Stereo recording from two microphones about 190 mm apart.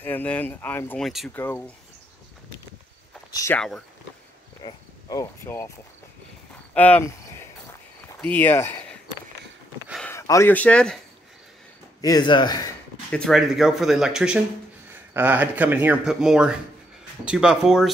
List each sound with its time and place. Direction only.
0.0 s speech: 10° left (ahead or behind)
3.3 s speech: 15° left (ahead or behind)
4.6 s speech: 20° left (ahead or behind)
6.7 s a sound: 10° left (ahead or behind)
8.2 s speech: 10° left (ahead or behind)
10.0 s speech: 15° left (ahead or behind)
12.0 s speech: 20° left (ahead or behind)
13.1 s speech: centre (ahead or behind)